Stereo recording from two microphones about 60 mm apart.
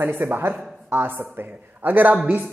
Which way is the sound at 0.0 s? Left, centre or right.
Right.